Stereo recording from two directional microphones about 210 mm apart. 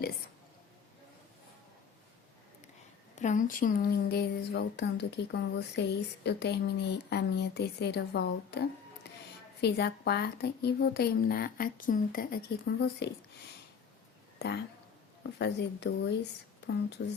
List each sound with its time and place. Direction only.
3.2 s speech: 35° left (ahead or behind); by 8.6 s 50° left (ahead or behind)
9.0 s a sound: 50° left (ahead or behind)
9.6 s speech: 50° left (ahead or behind)
14.3 s speech: 50° left (ahead or behind)